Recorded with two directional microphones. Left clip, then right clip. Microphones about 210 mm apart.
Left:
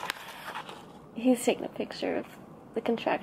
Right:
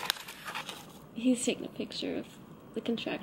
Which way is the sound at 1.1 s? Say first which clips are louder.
Left 5 dB; 20° left (ahead or behind).